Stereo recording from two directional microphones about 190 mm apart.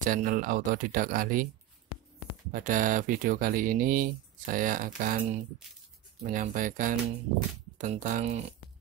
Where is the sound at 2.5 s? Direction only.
45° right (ahead or behind).